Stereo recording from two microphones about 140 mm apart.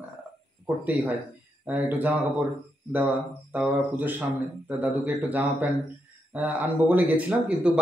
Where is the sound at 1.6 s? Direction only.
10° right (ahead or behind).